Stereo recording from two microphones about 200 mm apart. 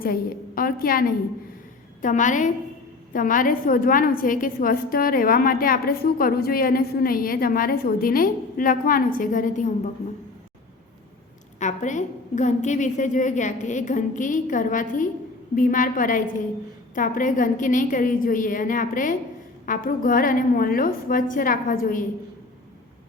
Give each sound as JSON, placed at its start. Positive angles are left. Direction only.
{"t": 0.0, "sound": "a woman's voice", "side_deg": 45}
{"t": 11.6, "sound": "a woman's voice", "side_deg": 40}